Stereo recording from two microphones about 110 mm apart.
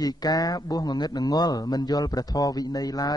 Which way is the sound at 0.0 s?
35° left (ahead or behind).